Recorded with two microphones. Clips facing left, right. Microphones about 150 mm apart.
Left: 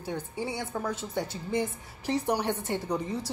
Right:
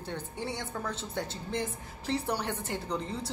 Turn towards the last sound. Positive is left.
turn(degrees=10)  # may be behind; listen again after turning